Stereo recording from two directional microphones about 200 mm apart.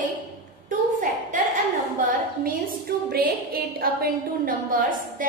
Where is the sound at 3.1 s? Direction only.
50° right (ahead or behind).